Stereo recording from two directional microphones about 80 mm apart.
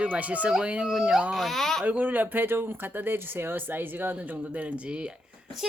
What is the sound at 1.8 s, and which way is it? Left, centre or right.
Speech, right.